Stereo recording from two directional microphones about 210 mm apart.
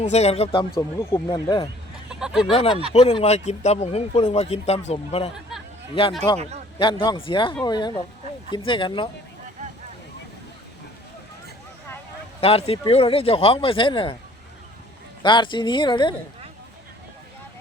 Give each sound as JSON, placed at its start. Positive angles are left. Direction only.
{"t": 0.0, "sound": "speech", "side_deg": 30}
{"t": 0.8, "sound": "speech", "side_deg": 15}
{"t": 2.0, "sound": "speech", "side_deg": -5}
{"t": 2.5, "sound": "speech", "side_deg": 25}
{"t": 12.4, "sound": "speech", "side_deg": 30}
{"t": 15.2, "sound": "speech", "side_deg": 20}